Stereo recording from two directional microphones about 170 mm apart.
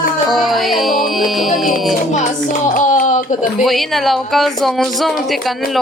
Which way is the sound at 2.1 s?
45° left (ahead or behind).